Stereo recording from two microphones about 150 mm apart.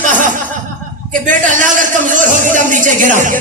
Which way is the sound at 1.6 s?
60° right (ahead or behind).